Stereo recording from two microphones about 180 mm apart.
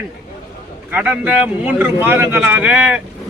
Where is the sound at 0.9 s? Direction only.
10° right (ahead or behind).